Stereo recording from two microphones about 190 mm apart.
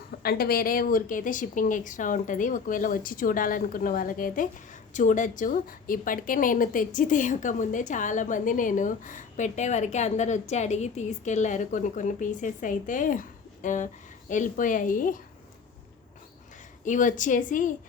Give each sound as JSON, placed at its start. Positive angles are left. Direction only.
{"t": 0.2, "sound": "a woman's voice", "side_deg": 55}
{"t": 16.8, "sound": "a woman's voice", "side_deg": 40}